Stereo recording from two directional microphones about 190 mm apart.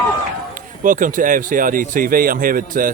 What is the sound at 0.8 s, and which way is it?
Speech, 45° right (ahead or behind).